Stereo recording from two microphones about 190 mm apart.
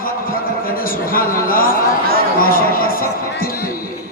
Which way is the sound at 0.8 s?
50° left (ahead or behind).